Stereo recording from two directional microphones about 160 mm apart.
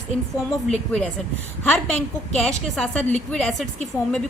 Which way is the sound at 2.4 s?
5° left (ahead or behind).